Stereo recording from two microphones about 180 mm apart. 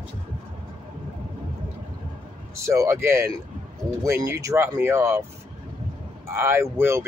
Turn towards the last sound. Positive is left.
turn(degrees=-15)  # may be behind; listen again after turning